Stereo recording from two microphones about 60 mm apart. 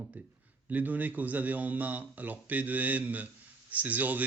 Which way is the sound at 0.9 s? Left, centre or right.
Right.